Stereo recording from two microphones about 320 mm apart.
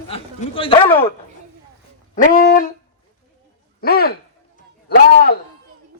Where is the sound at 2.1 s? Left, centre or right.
Left.